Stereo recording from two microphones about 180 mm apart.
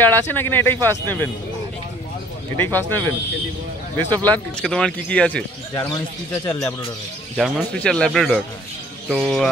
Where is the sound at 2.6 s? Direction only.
10° left (ahead or behind).